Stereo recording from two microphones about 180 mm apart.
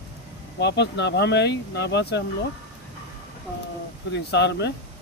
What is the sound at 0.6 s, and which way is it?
Speech, 70° left (ahead or behind).